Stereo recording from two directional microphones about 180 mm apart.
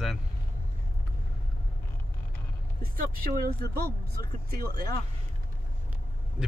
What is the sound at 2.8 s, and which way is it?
Speech, 55° right (ahead or behind).